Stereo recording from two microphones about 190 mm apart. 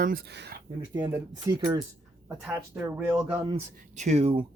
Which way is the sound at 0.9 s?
10° right (ahead or behind).